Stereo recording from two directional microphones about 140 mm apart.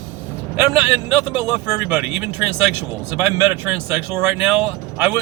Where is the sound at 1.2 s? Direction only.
15° right (ahead or behind).